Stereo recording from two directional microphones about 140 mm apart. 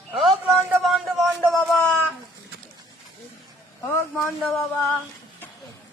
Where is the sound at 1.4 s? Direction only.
Centre (ahead or behind).